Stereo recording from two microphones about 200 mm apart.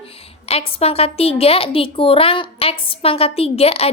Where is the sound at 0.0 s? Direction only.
30° left (ahead or behind).